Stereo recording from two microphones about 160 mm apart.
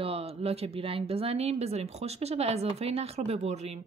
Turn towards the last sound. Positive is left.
turn(degrees=-40)  # may be behind; listen again after turning